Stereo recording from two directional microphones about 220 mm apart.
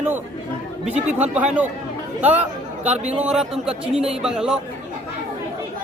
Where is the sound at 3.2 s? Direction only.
5° right (ahead or behind).